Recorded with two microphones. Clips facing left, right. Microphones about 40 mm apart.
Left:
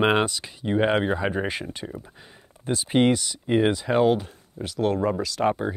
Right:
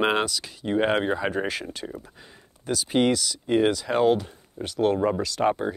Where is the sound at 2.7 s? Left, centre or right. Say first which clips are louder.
Left 1 dB; left; by 4.2 s centre.